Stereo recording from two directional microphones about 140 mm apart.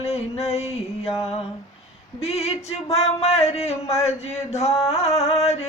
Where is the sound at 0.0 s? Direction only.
45° left (ahead or behind).